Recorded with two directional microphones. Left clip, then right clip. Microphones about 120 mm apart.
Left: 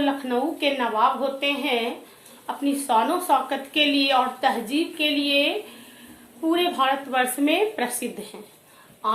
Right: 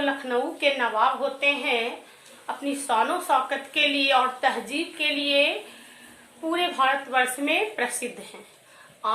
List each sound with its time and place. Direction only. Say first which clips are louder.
0.0 s a woman's voice: left 1 dB; 20° left (ahead or behind)
6.5 s a woman's voice: left 1 dB; 20° left (ahead or behind)